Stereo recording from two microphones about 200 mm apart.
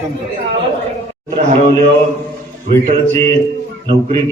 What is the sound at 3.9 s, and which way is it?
Speech, 25° right (ahead or behind).